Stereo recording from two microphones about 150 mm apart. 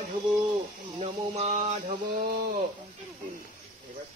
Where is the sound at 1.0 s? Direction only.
45° right (ahead or behind).